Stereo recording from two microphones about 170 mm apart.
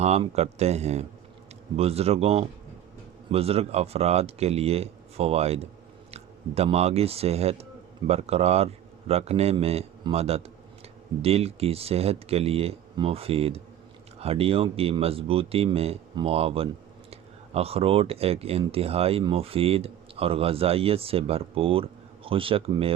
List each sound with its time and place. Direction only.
0.0 s speech: 40° right (ahead or behind)